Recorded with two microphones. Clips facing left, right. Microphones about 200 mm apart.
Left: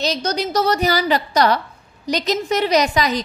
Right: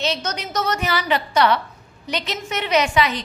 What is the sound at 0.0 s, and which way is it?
A woman's voice, 35° left (ahead or behind).